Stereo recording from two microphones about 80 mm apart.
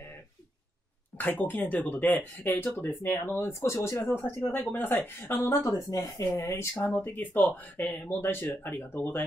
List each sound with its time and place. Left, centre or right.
1.1 s a woman's voice: left
3.3 s a woman's voice: left